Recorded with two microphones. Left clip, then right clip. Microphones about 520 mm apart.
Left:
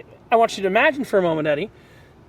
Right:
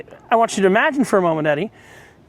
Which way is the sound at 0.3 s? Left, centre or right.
Right.